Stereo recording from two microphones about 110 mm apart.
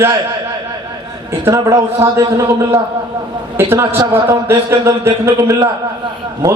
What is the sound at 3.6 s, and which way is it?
Speech, 20° right (ahead or behind).